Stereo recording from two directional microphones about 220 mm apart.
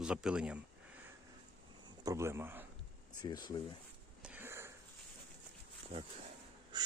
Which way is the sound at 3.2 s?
20° left (ahead or behind).